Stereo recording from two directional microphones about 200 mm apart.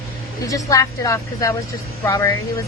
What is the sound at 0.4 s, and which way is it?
A woman's voice, 15° left (ahead or behind).